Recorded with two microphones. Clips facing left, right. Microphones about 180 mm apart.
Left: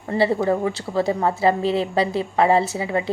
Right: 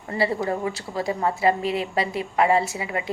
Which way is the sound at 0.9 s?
30° left (ahead or behind).